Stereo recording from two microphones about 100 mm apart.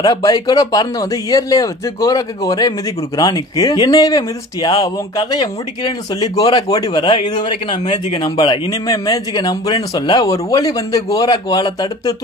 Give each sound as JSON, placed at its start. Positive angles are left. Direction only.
{"t": 0.0, "sound": "speech", "side_deg": 40}
{"t": 7.0, "sound": "a man's voice", "side_deg": 55}